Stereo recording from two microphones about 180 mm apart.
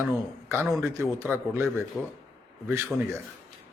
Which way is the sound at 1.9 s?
Centre (ahead or behind).